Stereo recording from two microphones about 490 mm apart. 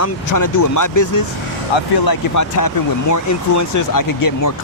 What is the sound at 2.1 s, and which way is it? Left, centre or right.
Speech, left.